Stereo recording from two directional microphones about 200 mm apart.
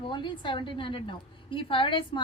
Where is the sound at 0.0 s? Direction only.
25° left (ahead or behind).